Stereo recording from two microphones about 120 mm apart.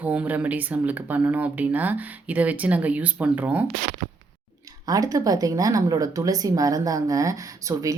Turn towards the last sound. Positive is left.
turn(degrees=-30)  # may be behind; listen again after turning